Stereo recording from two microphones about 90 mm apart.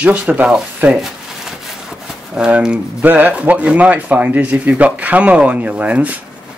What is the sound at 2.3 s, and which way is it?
Speech, 10° right (ahead or behind).